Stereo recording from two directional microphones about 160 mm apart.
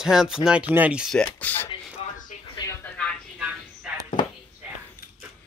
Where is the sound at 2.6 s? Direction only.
20° left (ahead or behind).